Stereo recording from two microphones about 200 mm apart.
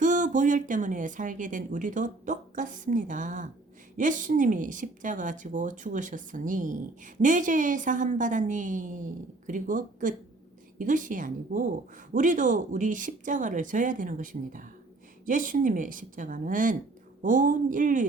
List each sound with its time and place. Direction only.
0.0 s speech: 40° right (ahead or behind)